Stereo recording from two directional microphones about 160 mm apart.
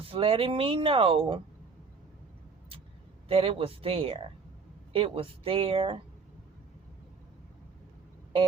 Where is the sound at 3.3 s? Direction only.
35° right (ahead or behind).